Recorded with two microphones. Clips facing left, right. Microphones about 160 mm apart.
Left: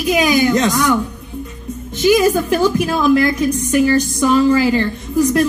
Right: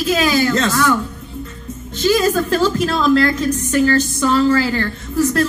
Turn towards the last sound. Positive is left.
turn(degrees=15)  # may be behind; listen again after turning